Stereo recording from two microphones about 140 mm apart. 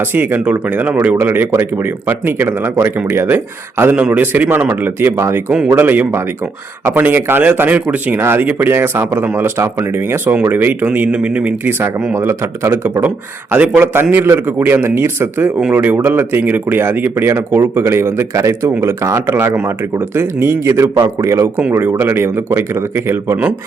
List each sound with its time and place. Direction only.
0.0 s speech: 15° right (ahead or behind)